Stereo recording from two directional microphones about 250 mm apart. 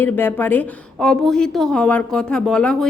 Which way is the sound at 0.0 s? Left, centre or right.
Centre.